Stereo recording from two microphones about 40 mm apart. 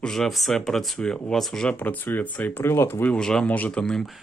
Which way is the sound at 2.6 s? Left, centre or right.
Left.